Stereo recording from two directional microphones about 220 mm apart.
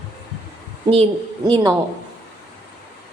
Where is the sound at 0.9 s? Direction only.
25° right (ahead or behind).